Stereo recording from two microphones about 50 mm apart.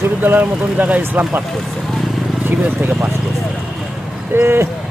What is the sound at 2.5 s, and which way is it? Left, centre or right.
Speech, right.